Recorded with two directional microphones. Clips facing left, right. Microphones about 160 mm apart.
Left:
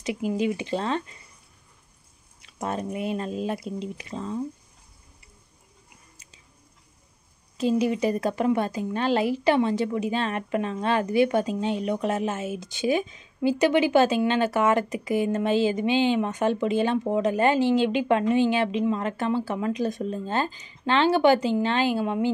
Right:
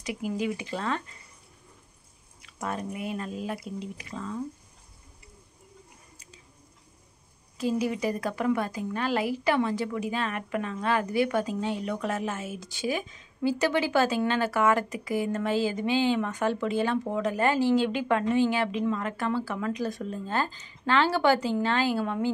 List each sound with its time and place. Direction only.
0.0 s a woman's voice: 25° left (ahead or behind)
2.4 s a woman's voice: 25° left (ahead or behind)
7.5 s a woman's voice: 25° left (ahead or behind)